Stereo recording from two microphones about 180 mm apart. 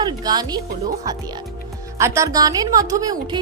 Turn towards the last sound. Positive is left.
turn(degrees=-20)  # may be behind; listen again after turning